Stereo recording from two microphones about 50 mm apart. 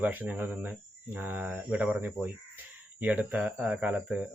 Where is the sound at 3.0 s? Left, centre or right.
Right.